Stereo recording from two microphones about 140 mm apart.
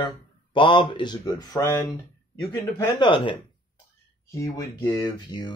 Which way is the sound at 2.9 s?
35° left (ahead or behind).